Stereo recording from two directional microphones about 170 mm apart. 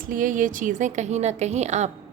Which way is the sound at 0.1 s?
50° right (ahead or behind).